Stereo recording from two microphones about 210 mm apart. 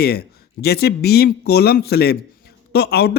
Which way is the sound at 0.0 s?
50° left (ahead or behind).